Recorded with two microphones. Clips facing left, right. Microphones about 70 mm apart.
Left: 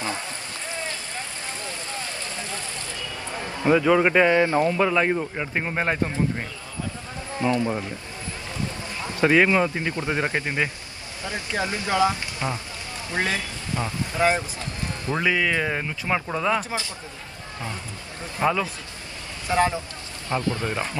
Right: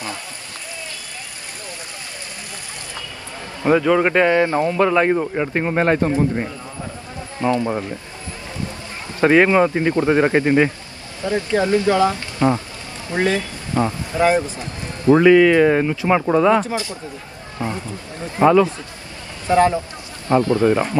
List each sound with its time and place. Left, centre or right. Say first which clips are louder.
3.8 s a man's voice: right 2 dB; centre
4.3 s speech: right 3 dB; right
4.6 s speech: right 5 dB; centre
7.3 s speech: right 4 dB; right
9.2 s speech: right 5 dB; centre
11.8 s speech: right 5 dB; left
12.4 s speech: right 10 dB; right
15.2 s speech: right 10 dB; centre; by 16.4 s right
18.2 s a man's voice: right 10 dB; right